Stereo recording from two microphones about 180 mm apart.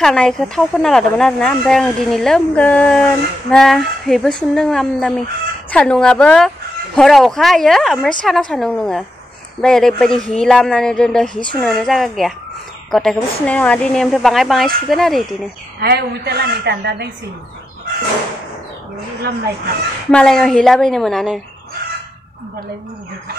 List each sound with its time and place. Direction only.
0.0 s speech: 5° left (ahead or behind)
15.8 s a woman's voice: 60° right (ahead or behind)
20.1 s speech: 5° left (ahead or behind)